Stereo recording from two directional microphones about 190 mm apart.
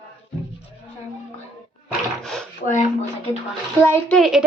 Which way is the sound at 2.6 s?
40° left (ahead or behind).